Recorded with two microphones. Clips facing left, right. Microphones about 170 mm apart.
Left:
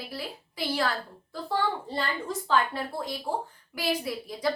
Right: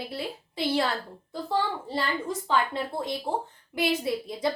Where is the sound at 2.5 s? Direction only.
20° right (ahead or behind).